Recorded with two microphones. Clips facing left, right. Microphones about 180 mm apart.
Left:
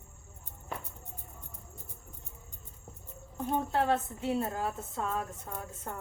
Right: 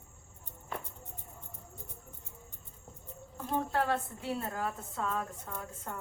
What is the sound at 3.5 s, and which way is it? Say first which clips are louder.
A woman's voice: left 2 dB; 25° left (ahead or behind).